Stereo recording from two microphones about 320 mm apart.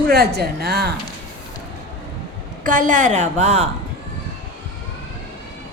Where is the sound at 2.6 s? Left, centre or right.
Right.